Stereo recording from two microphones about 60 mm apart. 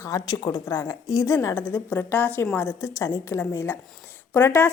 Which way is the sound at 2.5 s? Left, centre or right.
Left.